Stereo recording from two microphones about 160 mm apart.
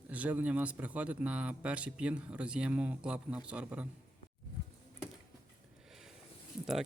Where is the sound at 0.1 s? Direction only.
10° right (ahead or behind).